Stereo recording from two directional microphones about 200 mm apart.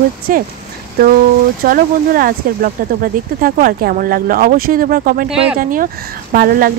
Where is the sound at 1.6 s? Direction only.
45° right (ahead or behind).